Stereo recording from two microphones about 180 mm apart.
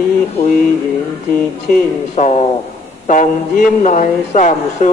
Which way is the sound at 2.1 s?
35° left (ahead or behind).